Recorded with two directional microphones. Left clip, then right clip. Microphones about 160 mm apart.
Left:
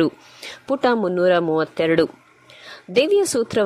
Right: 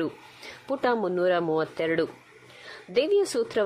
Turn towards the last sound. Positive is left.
turn(degrees=30)  # may be behind; listen again after turning